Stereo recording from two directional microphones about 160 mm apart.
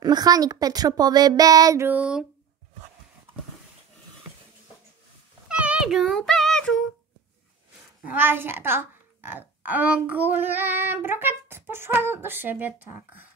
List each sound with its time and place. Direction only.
0.0 s a woman's voice: 25° right (ahead or behind); by 2.2 s 10° right (ahead or behind)
5.5 s child singing: 5° right (ahead or behind)
8.0 s a woman's voice: 10° right (ahead or behind)